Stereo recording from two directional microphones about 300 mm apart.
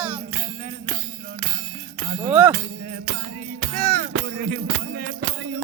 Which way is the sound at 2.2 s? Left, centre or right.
Centre.